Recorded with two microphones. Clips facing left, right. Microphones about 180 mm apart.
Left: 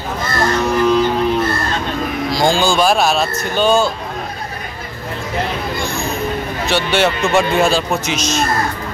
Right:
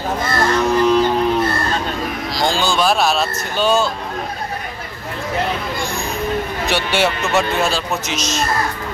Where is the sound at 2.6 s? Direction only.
Centre (ahead or behind).